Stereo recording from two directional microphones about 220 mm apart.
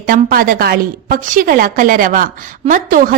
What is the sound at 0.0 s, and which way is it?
A woman's voice, 40° right (ahead or behind).